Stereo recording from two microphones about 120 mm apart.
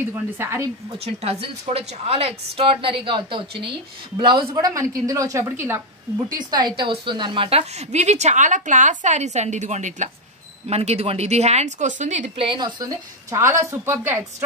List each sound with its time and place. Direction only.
0.0 s a woman's voice: 20° right (ahead or behind)
0.9 s a woman's voice: 55° right (ahead or behind)
4.6 s a woman's voice: 30° right (ahead or behind)
6.5 s a woman's voice: 40° right (ahead or behind); by 10.1 s 90° right
10.7 s speech: 60° right (ahead or behind); by 12.3 s 80° right
12.4 s a woman's voice: 45° right (ahead or behind); by 14.2 s 20° right (ahead or behind)